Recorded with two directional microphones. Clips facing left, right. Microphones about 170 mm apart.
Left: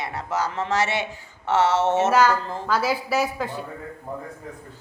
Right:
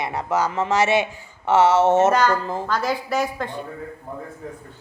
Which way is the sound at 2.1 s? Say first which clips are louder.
Even; 5° left (ahead or behind).